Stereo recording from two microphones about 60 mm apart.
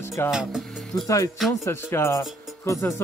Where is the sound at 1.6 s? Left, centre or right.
Left.